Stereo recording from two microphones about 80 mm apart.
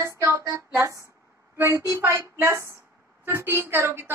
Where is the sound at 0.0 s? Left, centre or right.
Right.